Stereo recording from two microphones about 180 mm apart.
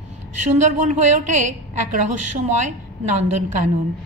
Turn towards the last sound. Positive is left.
turn(degrees=-40)  # may be behind; listen again after turning